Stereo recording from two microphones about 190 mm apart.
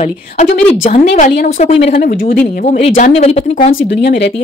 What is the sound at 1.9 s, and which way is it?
Speech, 45° left (ahead or behind).